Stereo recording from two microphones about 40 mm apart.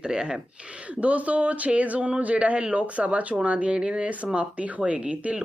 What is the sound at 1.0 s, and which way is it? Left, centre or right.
Speech, right.